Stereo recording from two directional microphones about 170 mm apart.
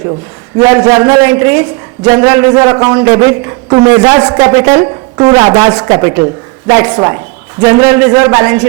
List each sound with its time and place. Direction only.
0.6 s a man's voice: 20° right (ahead or behind)